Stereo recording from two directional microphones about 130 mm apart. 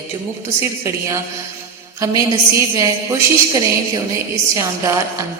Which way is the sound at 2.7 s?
25° right (ahead or behind).